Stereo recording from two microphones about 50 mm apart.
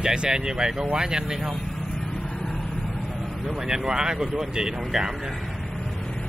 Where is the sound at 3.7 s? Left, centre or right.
Centre.